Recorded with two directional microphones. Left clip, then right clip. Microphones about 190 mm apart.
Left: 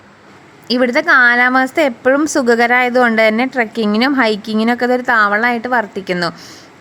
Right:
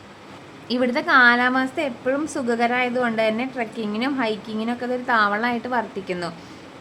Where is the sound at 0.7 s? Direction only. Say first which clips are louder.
Left 7 dB; 35° left (ahead or behind).